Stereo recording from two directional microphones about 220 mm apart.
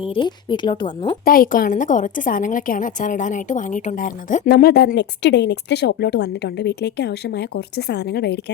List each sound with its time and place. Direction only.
0.0 s a woman's voice: 25° left (ahead or behind)
1.2 s a woman's voice: 40° left (ahead or behind)